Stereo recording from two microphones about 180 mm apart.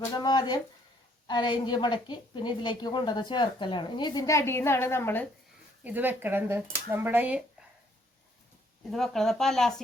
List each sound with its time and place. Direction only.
0.1 s a sound: 20° left (ahead or behind)
1.3 s a woman's voice: 25° left (ahead or behind)
5.8 s speech: 10° right (ahead or behind)
8.9 s speech: centre (ahead or behind)